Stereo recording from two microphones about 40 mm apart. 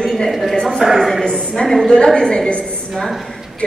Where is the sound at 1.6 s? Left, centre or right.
Centre.